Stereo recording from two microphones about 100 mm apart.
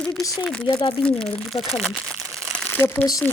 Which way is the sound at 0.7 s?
50° left (ahead or behind).